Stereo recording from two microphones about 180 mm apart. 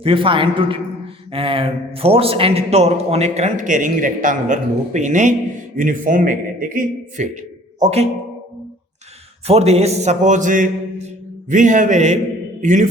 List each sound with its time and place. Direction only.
0.0 s a man's voice: 30° right (ahead or behind)
9.5 s a man's voice: 35° right (ahead or behind)